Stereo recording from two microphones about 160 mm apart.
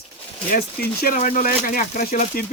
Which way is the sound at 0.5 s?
60° left (ahead or behind).